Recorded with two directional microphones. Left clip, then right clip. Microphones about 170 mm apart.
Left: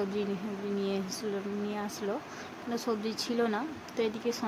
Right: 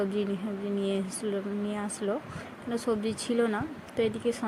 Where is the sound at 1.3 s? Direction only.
15° right (ahead or behind).